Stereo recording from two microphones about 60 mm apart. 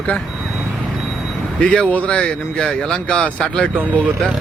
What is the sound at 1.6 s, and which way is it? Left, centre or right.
Speech, centre.